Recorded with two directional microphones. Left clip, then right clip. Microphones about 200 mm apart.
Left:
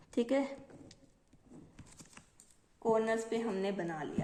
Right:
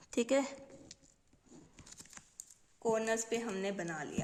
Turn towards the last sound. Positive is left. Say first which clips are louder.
# left 2 dB
turn(degrees=-30)  # may be behind; listen again after turning